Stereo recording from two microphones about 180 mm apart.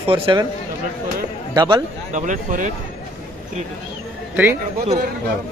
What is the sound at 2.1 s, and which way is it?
Speech, 45° right (ahead or behind).